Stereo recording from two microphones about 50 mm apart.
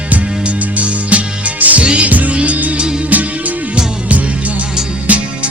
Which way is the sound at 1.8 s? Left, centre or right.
Centre.